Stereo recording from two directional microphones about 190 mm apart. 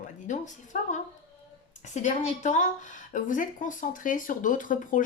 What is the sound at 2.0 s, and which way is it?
Speech, 40° left (ahead or behind).